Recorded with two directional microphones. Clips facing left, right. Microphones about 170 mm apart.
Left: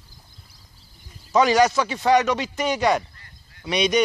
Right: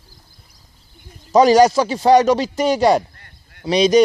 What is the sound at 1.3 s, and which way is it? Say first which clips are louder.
Speech: right 6 dB; 35° right (ahead or behind).